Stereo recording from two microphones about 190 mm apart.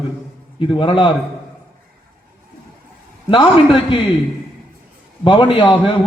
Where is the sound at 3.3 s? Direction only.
25° left (ahead or behind).